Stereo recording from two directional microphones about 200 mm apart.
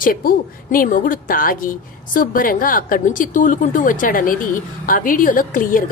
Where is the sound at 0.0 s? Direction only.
45° left (ahead or behind).